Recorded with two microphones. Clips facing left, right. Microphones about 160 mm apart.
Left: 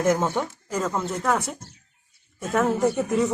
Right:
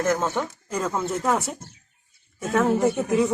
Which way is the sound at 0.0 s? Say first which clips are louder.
Left 1 dB; 15° left (ahead or behind).